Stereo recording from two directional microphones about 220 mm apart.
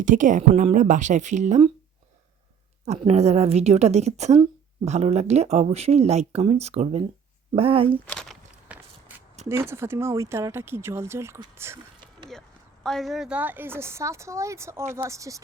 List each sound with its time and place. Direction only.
0.0 s speech: 35° right (ahead or behind)
2.8 s speech: 30° right (ahead or behind)
8.1 s walk: 5° left (ahead or behind)
8.6 s walk: 5° right (ahead or behind)
9.5 s speech: 10° right (ahead or behind)
12.8 s speech: centre (ahead or behind); by 15.4 s 15° right (ahead or behind)